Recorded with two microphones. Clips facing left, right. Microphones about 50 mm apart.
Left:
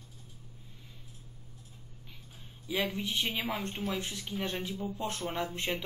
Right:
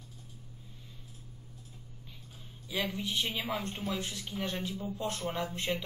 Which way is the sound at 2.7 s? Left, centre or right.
Left.